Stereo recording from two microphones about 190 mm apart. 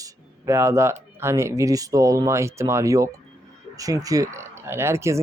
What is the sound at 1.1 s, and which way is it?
Speech, 15° right (ahead or behind).